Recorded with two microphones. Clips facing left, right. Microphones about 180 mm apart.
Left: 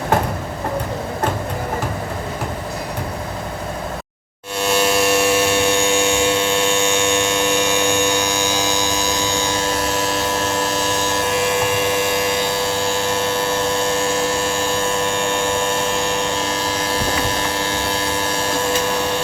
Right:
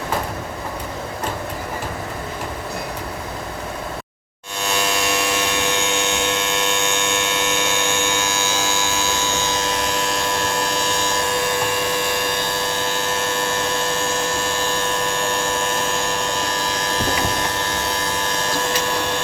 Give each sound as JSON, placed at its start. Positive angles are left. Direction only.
{"t": 4.6, "sound": "vehicle", "side_deg": 5}
{"t": 7.4, "sound": "a sound", "side_deg": 15}
{"t": 13.1, "sound": "a sound", "side_deg": 10}
{"t": 16.5, "sound": "vehicle", "side_deg": 5}
{"t": 17.7, "sound": "vehicle", "side_deg": 30}
{"t": 18.2, "sound": "vacuum cleaner", "side_deg": 10}